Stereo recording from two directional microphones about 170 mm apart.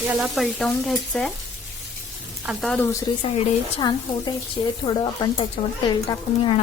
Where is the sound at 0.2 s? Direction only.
Centre (ahead or behind).